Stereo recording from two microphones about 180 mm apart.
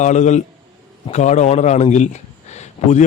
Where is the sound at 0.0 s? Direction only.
40° left (ahead or behind).